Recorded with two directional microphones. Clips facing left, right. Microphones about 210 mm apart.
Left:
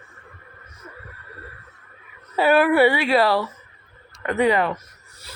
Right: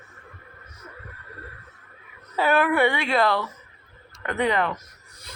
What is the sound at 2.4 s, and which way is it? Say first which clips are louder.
Speech: left 5 dB; 10° left (ahead or behind).